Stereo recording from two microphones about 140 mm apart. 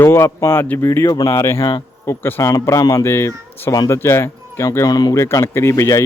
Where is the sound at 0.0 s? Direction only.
20° left (ahead or behind).